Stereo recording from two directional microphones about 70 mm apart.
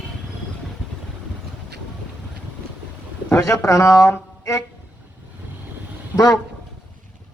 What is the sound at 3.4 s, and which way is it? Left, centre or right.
A man's voice, left.